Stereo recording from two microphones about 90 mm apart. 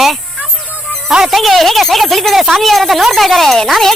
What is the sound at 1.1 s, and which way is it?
Speech, 5° right (ahead or behind).